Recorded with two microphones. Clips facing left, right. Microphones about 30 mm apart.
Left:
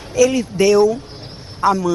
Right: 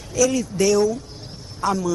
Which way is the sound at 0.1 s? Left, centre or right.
Left.